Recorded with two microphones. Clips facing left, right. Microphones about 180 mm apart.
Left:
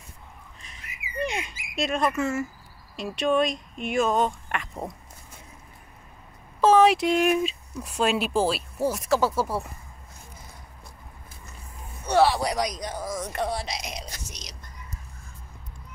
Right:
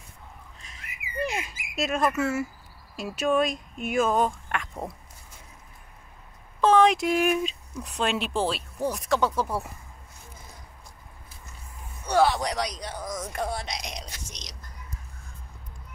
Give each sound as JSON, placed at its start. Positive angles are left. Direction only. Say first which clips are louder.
{"t": 0.6, "sound": "a sound", "louder": "even", "side_deg": 0}
{"t": 1.8, "sound": "speech", "louder": "even", "side_deg": -5}
{"t": 6.6, "sound": "speech", "louder": "left 2 dB", "side_deg": 5}
{"t": 12.2, "sound": "speech", "louder": "left 2 dB", "side_deg": 5}